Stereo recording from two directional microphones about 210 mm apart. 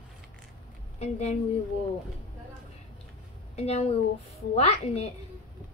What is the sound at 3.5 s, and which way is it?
A woman's voice, 30° left (ahead or behind).